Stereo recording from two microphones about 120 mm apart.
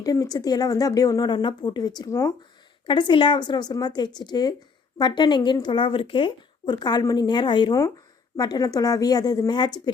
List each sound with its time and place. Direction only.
0.0 s speech: 30° left (ahead or behind)
2.8 s speech: 40° left (ahead or behind)